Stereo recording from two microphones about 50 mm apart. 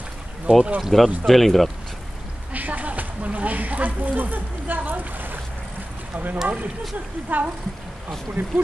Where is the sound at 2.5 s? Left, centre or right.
Right.